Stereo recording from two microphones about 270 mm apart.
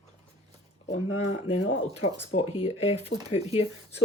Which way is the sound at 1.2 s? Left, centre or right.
Left.